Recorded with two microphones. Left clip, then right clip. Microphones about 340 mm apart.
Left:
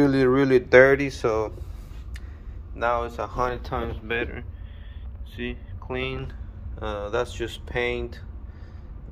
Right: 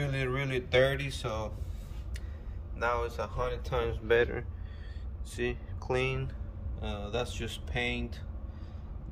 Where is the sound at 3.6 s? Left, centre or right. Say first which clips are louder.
Left 2 dB; centre.